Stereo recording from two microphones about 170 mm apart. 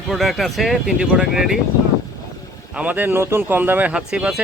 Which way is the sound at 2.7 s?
5° right (ahead or behind).